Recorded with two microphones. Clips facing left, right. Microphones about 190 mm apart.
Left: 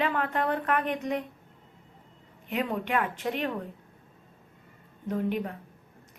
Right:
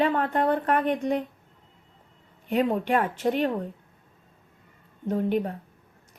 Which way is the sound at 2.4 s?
35° right (ahead or behind).